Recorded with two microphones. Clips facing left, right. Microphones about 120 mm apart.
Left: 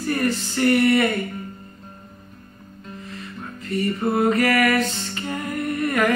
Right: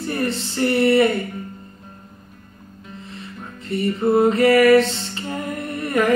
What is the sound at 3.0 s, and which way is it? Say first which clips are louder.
Music: even; 25° right (ahead or behind).